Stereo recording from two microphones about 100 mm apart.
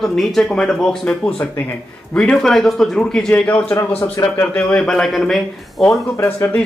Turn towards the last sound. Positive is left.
turn(degrees=25)  # may be behind; listen again after turning